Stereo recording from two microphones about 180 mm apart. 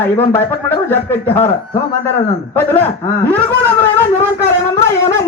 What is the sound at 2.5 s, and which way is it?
Speech, 10° left (ahead or behind).